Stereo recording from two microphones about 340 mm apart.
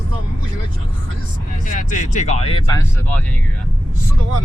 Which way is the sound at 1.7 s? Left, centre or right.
Left.